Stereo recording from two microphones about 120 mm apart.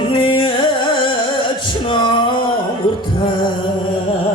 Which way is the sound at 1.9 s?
45° left (ahead or behind).